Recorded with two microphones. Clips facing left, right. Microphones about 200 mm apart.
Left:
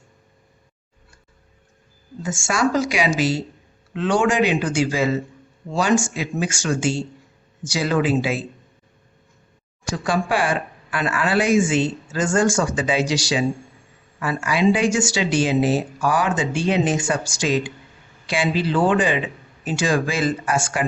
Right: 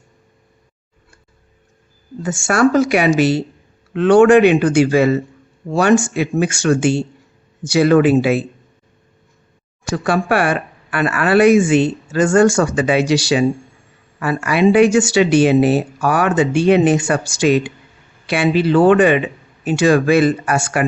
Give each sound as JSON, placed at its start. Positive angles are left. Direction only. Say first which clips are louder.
{"t": 2.2, "sound": "speech", "louder": "right 7 dB", "side_deg": -65}
{"t": 9.8, "sound": "speech", "louder": "right 5 dB", "side_deg": -60}